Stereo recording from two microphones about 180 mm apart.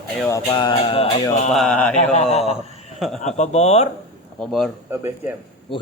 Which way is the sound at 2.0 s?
40° left (ahead or behind).